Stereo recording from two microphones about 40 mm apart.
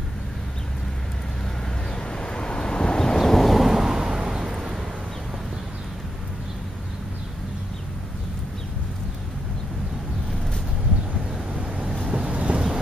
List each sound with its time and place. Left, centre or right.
2.0 s vehicle: left; by 4.7 s centre
11.5 s waves: right